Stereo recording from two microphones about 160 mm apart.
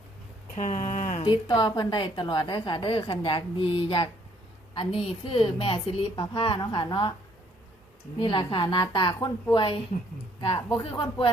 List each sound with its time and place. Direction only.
0.5 s a sound: 50° left (ahead or behind)
1.2 s a woman's voice: 30° left (ahead or behind)
8.2 s a woman's voice: 30° left (ahead or behind)